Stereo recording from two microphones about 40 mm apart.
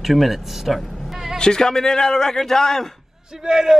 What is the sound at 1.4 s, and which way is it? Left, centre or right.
A man's voice, centre.